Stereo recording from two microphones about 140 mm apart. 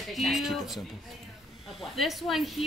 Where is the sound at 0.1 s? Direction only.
Centre (ahead or behind).